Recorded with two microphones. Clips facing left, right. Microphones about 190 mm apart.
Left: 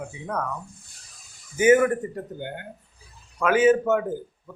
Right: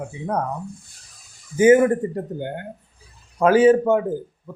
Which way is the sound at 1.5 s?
30° right (ahead or behind).